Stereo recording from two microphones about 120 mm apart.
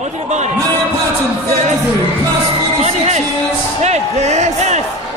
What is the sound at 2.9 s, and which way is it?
A man's voice, 70° right (ahead or behind).